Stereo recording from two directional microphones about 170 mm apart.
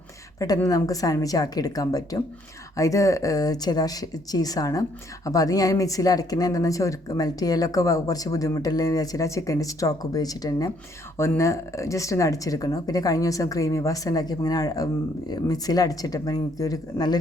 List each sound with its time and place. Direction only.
0.3 s speech: 20° left (ahead or behind)